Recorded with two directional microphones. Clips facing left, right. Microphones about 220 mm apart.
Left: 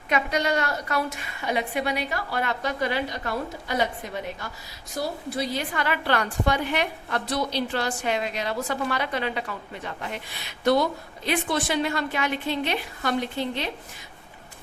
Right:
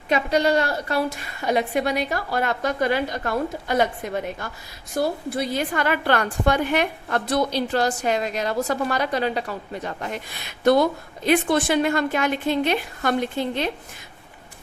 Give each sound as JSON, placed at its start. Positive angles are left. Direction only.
{"t": 0.1, "sound": "a woman's voice", "side_deg": -30}